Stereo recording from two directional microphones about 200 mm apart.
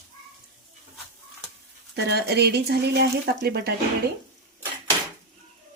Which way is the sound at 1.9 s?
55° right (ahead or behind).